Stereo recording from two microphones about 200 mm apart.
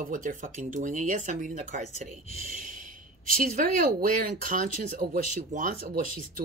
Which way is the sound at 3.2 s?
45° right (ahead or behind).